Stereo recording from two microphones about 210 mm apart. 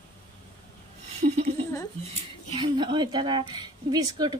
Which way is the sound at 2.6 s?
20° right (ahead or behind).